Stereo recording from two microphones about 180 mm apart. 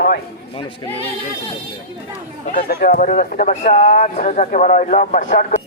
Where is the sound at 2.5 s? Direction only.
55° left (ahead or behind).